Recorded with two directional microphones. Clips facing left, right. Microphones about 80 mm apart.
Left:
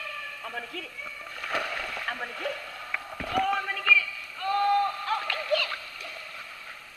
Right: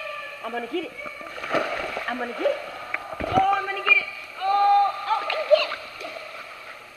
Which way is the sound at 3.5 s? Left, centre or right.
Right.